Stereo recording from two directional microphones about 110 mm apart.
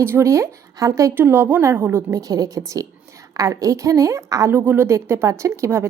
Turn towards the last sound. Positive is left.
turn(degrees=-25)  # may be behind; listen again after turning